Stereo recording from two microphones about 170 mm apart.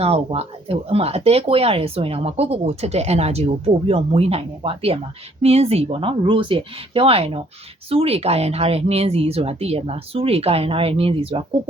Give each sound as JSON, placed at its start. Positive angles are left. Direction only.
{"t": 0.0, "sound": "speech", "side_deg": -35}